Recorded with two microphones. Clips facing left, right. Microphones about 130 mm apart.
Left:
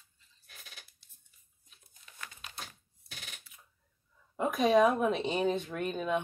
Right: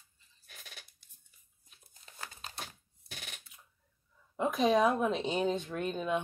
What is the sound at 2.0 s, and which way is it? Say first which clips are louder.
Crumpling: right 2 dB; 35° right (ahead or behind).